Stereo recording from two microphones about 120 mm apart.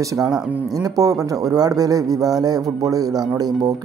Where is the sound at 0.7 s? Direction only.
30° right (ahead or behind).